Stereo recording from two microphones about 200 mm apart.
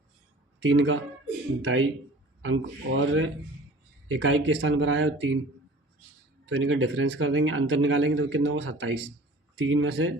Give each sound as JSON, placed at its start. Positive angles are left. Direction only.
{"t": 0.6, "sound": "speech", "side_deg": -70}
{"t": 6.4, "sound": "speech", "side_deg": -75}